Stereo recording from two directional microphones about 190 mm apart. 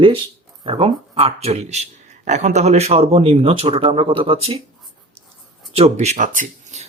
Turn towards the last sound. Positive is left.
turn(degrees=-40)  # may be behind; listen again after turning